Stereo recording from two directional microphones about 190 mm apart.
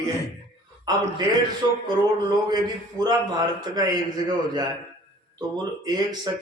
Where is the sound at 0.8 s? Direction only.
20° right (ahead or behind).